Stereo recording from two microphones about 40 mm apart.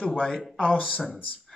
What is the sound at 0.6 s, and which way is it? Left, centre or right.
Speech, left.